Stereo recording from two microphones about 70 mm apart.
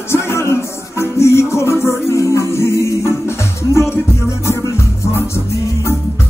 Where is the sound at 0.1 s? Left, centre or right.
Left.